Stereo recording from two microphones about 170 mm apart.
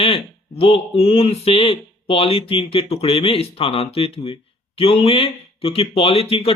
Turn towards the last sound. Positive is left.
turn(degrees=35)  # may be behind; listen again after turning